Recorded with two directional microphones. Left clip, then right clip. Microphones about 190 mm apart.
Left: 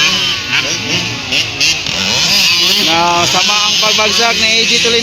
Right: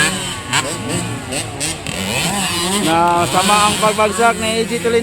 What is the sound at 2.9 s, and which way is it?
Speech, 5° left (ahead or behind).